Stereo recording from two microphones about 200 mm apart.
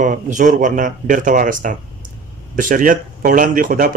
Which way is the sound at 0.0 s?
40° right (ahead or behind).